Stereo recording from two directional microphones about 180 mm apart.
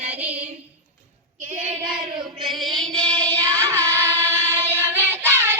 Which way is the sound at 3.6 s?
15° right (ahead or behind).